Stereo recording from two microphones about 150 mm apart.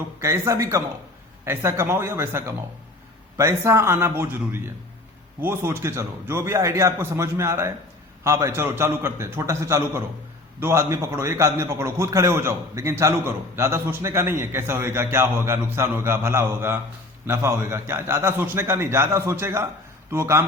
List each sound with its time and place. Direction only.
0.2 s a man's voice: 20° right (ahead or behind)